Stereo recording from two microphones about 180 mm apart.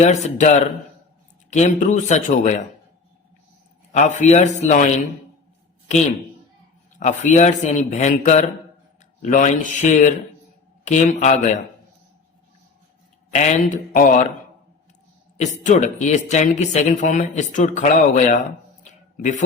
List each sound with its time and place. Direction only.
0.0 s speech: 40° left (ahead or behind)
3.9 s speech: 40° left (ahead or behind)
7.0 s speech: 45° left (ahead or behind)
13.3 s speech: 40° left (ahead or behind)
15.4 s speech: 45° left (ahead or behind)